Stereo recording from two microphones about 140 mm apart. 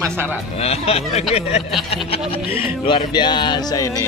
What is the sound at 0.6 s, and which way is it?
Speech, 45° left (ahead or behind).